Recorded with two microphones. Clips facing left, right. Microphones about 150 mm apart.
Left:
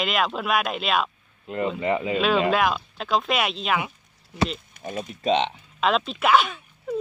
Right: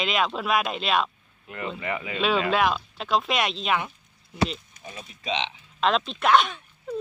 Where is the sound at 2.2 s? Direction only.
Centre (ahead or behind).